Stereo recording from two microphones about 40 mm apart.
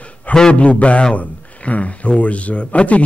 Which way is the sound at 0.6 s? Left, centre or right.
Left.